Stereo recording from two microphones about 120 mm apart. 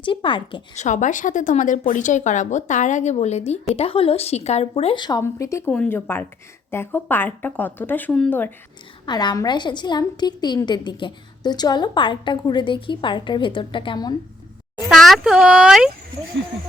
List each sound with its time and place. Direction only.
0.0 s a woman's voice: 45° left (ahead or behind)
0.8 s speech: 90° left; by 4.9 s 55° left (ahead or behind)
4.9 s a woman's voice: 35° left (ahead or behind)
5.2 s speech: 25° left (ahead or behind)
5.7 s speech: 15° left (ahead or behind)
9.0 s a woman's voice: 35° left (ahead or behind)
14.8 s speech: centre (ahead or behind)